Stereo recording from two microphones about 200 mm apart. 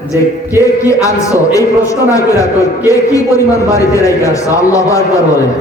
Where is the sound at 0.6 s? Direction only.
15° left (ahead or behind).